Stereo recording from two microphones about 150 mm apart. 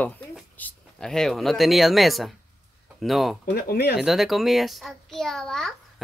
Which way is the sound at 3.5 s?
90° left.